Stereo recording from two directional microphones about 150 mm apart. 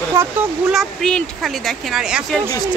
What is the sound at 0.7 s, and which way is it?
Speech, centre (ahead or behind).